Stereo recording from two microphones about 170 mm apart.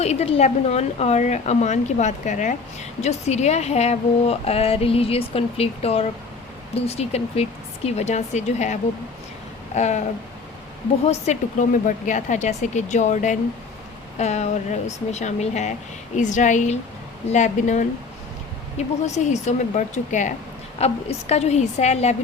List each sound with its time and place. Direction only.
0.0 s speech: 40° left (ahead or behind)
11.0 s speech: 40° left (ahead or behind)